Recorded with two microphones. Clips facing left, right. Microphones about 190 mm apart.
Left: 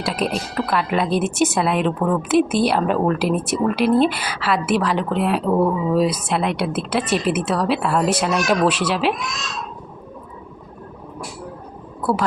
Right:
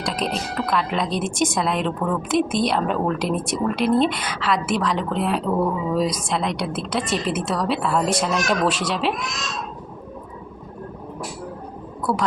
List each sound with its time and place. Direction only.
0.0 s a woman's voice: 5° left (ahead or behind)
12.1 s a woman's voice: centre (ahead or behind)